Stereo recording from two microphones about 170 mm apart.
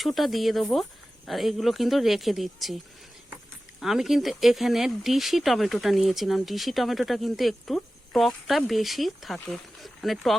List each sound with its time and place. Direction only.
0.0 s speech: centre (ahead or behind)